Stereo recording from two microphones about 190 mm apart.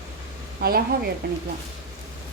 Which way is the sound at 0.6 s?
55° right (ahead or behind).